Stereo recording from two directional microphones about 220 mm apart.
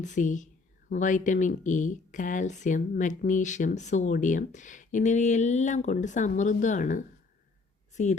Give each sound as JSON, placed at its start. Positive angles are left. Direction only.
{"t": 0.0, "sound": "speech", "side_deg": 35}